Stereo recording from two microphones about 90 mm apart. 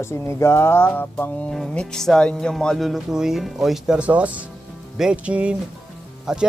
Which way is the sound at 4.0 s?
15° right (ahead or behind).